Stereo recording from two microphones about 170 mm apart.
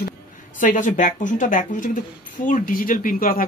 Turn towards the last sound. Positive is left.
turn(degrees=55)  # may be behind; listen again after turning